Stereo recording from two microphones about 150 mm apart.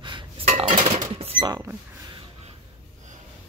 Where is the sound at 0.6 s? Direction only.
35° right (ahead or behind).